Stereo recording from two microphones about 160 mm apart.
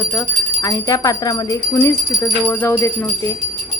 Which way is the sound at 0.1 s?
15° left (ahead or behind).